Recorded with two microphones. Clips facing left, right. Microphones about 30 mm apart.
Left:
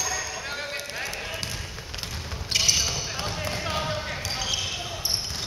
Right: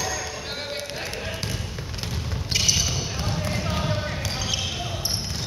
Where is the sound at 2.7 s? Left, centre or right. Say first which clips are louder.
Right 1 dB; left.